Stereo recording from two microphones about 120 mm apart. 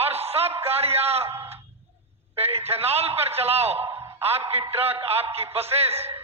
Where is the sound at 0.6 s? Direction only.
55° right (ahead or behind).